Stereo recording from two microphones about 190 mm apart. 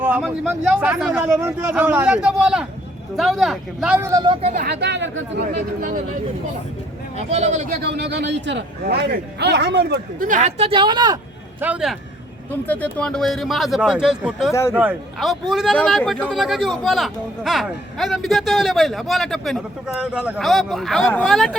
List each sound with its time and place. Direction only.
0.0 s a man's voice: 10° right (ahead or behind)
4.1 s speech: 25° right (ahead or behind)
4.6 s a man's voice: 65° right (ahead or behind)
5.4 s speech: 45° right (ahead or behind)
7.2 s speech: 35° right (ahead or behind)
7.7 s a man's voice: 60° right (ahead or behind)
10.2 s speech: 40° right (ahead or behind); by 11.2 s 20° right (ahead or behind)
11.6 s a man's voice: 5° right (ahead or behind)
12.6 s a man's voice: 10° left (ahead or behind)